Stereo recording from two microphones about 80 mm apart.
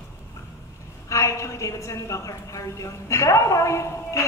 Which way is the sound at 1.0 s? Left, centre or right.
Left.